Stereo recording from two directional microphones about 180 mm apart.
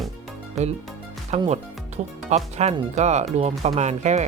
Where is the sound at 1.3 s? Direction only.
35° right (ahead or behind).